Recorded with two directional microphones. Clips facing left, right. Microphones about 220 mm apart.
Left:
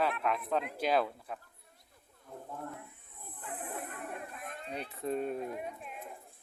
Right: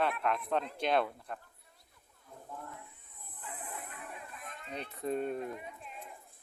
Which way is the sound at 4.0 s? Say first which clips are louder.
Left 5 dB; 55° left (ahead or behind).